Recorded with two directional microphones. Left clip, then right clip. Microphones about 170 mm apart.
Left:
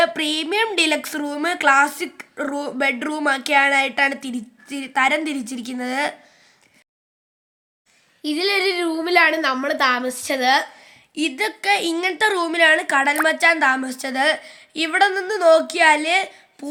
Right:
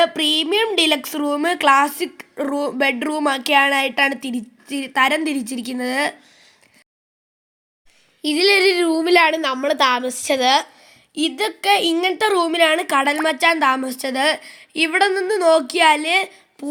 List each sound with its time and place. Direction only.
0.0 s speech: 15° right (ahead or behind)
8.2 s a woman's voice: 40° right (ahead or behind)
10.8 s speech: 20° right (ahead or behind)